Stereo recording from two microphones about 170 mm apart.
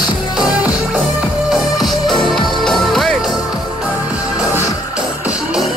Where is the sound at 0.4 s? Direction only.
5° right (ahead or behind).